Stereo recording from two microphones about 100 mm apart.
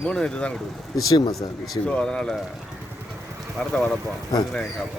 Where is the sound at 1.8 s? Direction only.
10° left (ahead or behind).